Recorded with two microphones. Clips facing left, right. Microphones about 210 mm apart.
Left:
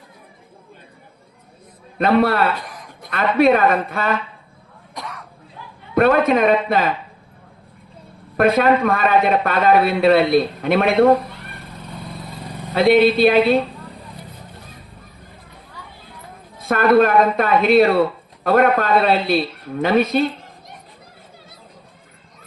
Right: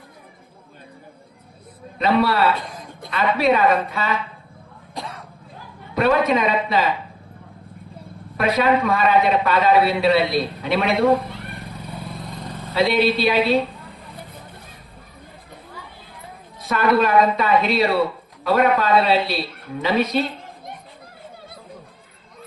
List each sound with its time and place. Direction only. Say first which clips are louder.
2.0 s a man's voice: left 2 dB; 55° left (ahead or behind)
2.6 s a sound: right 2 dB; 25° right (ahead or behind)
3.1 s a man's voice: left 4 dB; 50° left (ahead or behind)
4.9 s a sound: right 1 dB; 25° right (ahead or behind)
5.9 s a man's voice: left 3 dB; 50° left (ahead or behind)
8.4 s a man's voice: left 4 dB; 50° left (ahead or behind)
12.7 s a man's voice: left 5 dB; 55° left (ahead or behind)
16.6 s a man's voice: left 5 dB; 50° left (ahead or behind)